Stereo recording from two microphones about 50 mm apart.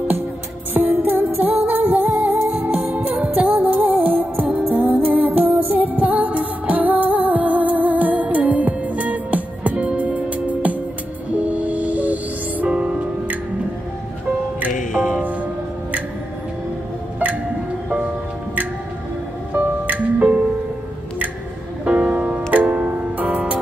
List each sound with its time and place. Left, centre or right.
0.7 s music: right
15.0 s music: right
19.5 s music: right
21.8 s music: right